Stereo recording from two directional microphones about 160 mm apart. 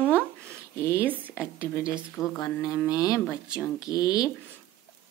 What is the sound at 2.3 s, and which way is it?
Speech, 25° left (ahead or behind).